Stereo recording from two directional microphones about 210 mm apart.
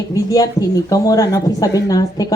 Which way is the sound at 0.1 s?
15° left (ahead or behind).